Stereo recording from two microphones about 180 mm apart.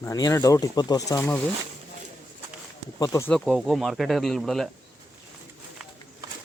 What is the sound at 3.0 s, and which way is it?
Speech, 15° left (ahead or behind).